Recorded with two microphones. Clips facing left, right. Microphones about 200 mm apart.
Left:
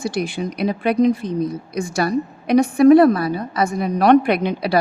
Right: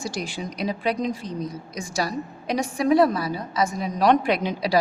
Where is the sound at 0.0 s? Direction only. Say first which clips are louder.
Left 7 dB; 60° left (ahead or behind).